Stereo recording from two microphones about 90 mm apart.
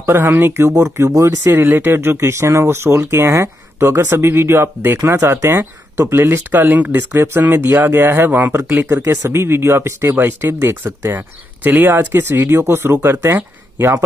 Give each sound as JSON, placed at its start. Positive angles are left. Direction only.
{"t": 0.0, "sound": "speech", "side_deg": -25}